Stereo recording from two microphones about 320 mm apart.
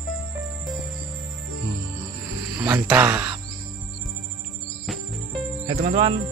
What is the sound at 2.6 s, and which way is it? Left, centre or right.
Speech, centre.